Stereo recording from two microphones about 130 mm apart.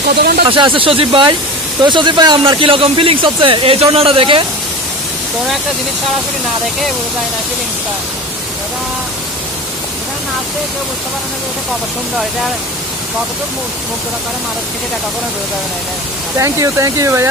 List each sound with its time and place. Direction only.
0.4 s speech: 40° right (ahead or behind)
16.3 s speech: 25° right (ahead or behind)